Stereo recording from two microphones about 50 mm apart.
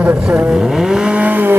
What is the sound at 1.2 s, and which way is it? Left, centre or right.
Speech, right.